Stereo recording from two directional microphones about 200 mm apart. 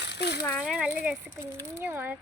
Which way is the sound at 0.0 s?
55° left (ahead or behind).